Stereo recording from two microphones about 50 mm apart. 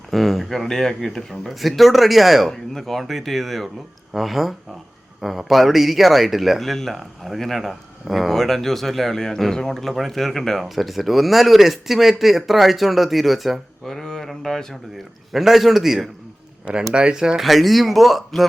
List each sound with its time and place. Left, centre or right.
0.1 s speech: centre
15.3 s speech: centre
16.6 s speech: centre
17.4 s speech: centre